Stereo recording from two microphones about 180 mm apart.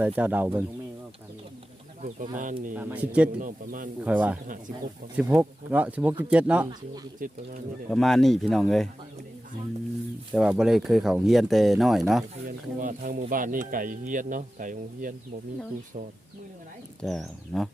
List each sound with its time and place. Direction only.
0.0 s speech: 10° right (ahead or behind)
2.0 s speech: 45° right (ahead or behind)
2.7 s speech: 10° right (ahead or behind)
3.4 s speech: 50° right (ahead or behind)
4.0 s speech: 10° right (ahead or behind)
7.2 s speech: 50° right (ahead or behind)
7.9 s speech: centre (ahead or behind)
10.3 s speech: 5° right (ahead or behind)
12.5 s speech: 45° right (ahead or behind)
17.0 s speech: centre (ahead or behind)